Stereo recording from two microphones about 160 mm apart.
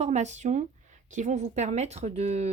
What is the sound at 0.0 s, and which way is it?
Speech, 45° right (ahead or behind).